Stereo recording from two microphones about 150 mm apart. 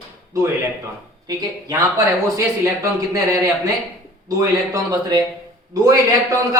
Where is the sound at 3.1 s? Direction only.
20° right (ahead or behind).